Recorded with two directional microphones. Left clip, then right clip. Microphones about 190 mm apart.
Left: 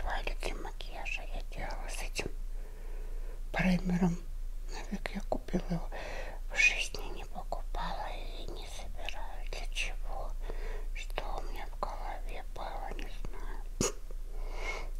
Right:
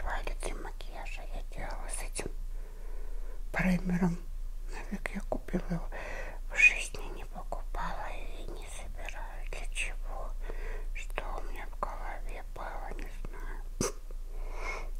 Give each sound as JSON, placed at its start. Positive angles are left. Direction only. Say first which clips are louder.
{"t": 0.0, "sound": "whispering", "louder": "left 1 dB", "side_deg": -5}
{"t": 3.5, "sound": "speech", "louder": "even", "side_deg": -5}
{"t": 4.6, "sound": "whispering", "louder": "right 1 dB", "side_deg": -5}
{"t": 14.4, "sound": "a sound", "louder": "even", "side_deg": 0}